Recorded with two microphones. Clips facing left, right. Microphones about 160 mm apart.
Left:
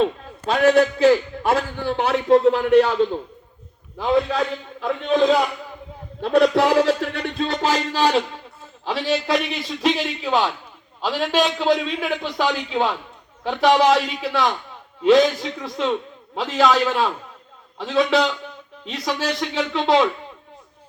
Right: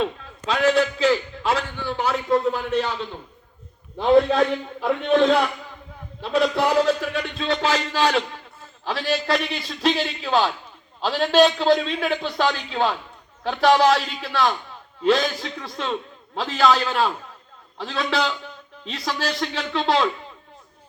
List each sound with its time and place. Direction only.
0.4 s a man's voice: 50° left (ahead or behind)
3.9 s a man's voice: 25° right (ahead or behind)
4.8 s a man's voice: centre (ahead or behind)
6.2 s a man's voice: 60° left (ahead or behind); by 8.1 s 40° left (ahead or behind)
8.8 s a man's voice: 20° left (ahead or behind)